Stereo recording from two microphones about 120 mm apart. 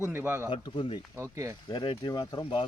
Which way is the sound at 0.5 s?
45° left (ahead or behind).